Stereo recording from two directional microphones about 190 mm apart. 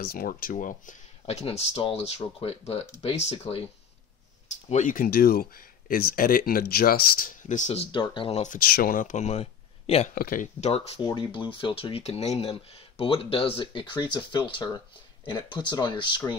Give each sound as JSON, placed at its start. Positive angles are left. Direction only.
{"t": 0.0, "sound": "speech", "side_deg": 50}
{"t": 10.1, "sound": "speech", "side_deg": 50}